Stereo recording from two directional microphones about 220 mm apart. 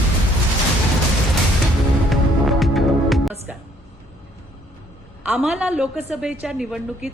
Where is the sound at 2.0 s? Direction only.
Centre (ahead or behind).